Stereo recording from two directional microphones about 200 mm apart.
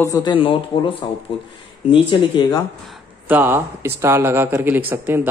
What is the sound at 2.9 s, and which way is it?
Speech, 10° right (ahead or behind).